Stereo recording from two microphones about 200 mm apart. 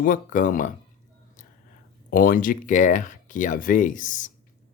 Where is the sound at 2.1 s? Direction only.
40° left (ahead or behind).